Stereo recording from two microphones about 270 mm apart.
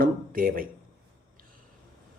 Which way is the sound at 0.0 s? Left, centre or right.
Right.